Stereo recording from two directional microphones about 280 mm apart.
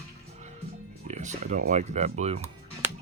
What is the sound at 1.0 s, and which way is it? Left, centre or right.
Speech, right.